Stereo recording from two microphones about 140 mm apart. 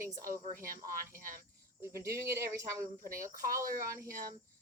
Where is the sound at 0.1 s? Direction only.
85° right.